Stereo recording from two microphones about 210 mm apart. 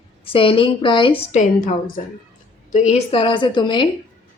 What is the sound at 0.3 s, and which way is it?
A woman's voice, 25° left (ahead or behind).